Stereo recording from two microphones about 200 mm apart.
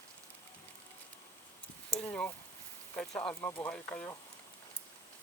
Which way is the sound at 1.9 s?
5° left (ahead or behind).